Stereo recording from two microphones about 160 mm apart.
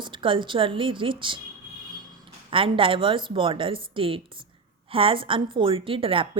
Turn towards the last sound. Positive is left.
turn(degrees=-35)  # may be behind; listen again after turning